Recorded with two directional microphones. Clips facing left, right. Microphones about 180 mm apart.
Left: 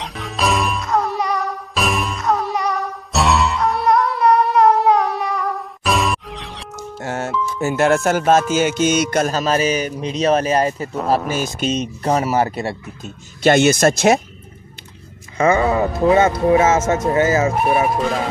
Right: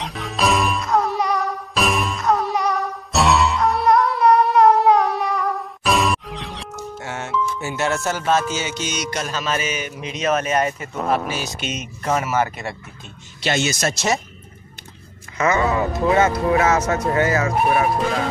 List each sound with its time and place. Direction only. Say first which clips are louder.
0.0 s music: even; centre (ahead or behind)
7.0 s music: left 8 dB; 40° left (ahead or behind)
7.6 s speech: left 12 dB; 50° left (ahead or behind)
8.5 s music: left 10 dB; 50° left (ahead or behind); by 13.1 s 35° left (ahead or behind)
13.4 s speech: left 9 dB; 55° left (ahead or behind)
15.3 s speech: left 3 dB; 30° left (ahead or behind)